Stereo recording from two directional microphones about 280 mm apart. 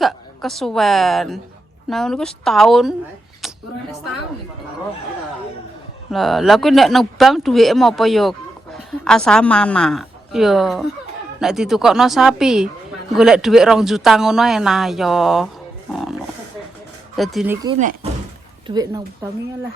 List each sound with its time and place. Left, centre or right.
0.0 s a woman's voice: centre
6.1 s speech: centre
15.9 s a sound: centre
17.2 s speech: centre
17.7 s speech: right
18.7 s speech: centre